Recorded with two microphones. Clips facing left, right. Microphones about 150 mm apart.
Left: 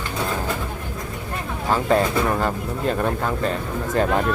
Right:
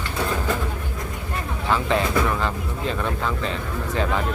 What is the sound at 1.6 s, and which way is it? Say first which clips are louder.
Speech: left 3 dB; 40° left (ahead or behind).